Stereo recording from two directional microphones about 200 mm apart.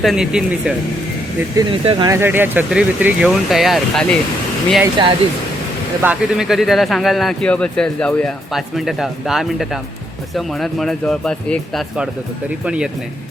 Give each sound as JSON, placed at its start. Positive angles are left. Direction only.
{"t": 0.0, "sound": "speech", "side_deg": 0}
{"t": 1.5, "sound": "speech", "side_deg": -25}
{"t": 2.1, "sound": "speech", "side_deg": -10}
{"t": 5.0, "sound": "speech", "side_deg": -20}
{"t": 6.0, "sound": "speech", "side_deg": -5}